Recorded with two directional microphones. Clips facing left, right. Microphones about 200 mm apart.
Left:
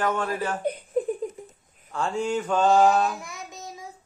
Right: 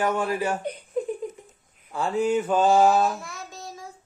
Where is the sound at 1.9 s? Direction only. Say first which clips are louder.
Right 3 dB; 5° right (ahead or behind).